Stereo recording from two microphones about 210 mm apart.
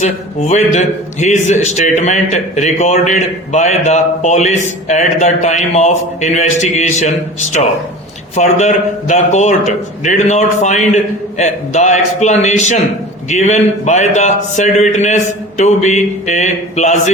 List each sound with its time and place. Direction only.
0.0 s a man's voice: 35° left (ahead or behind)
8.4 s a man's voice: 35° left (ahead or behind)